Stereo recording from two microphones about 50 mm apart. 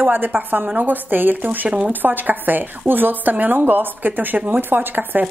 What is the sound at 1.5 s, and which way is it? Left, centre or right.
Speech, right.